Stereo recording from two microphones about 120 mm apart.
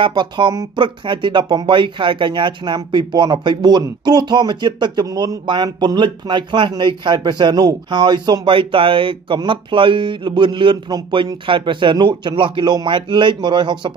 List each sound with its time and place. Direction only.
0.0 s speech: 40° right (ahead or behind)